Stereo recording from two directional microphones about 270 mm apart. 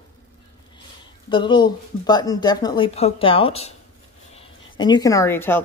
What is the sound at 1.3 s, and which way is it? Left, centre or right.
Speech, centre.